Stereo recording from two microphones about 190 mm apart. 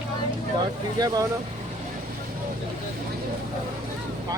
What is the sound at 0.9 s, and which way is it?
Speech, 20° right (ahead or behind).